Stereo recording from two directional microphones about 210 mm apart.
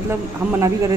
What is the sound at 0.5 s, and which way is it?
Speech, 15° right (ahead or behind).